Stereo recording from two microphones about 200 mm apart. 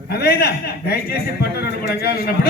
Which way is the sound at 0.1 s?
50° left (ahead or behind).